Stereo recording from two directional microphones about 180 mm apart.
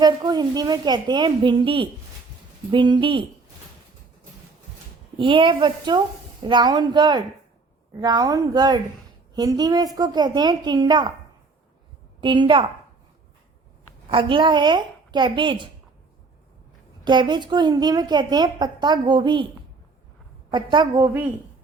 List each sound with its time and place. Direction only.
0.0 s a woman's voice: 25° right (ahead or behind)
5.1 s a woman's voice: 30° right (ahead or behind)
12.2 s a woman's voice: 25° right (ahead or behind)
14.1 s a woman's voice: 30° right (ahead or behind)
17.0 s a woman's voice: 25° right (ahead or behind)
20.5 s a woman's voice: 25° right (ahead or behind)